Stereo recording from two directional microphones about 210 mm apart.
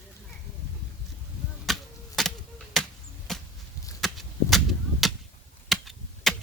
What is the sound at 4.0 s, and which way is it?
Chop, centre (ahead or behind).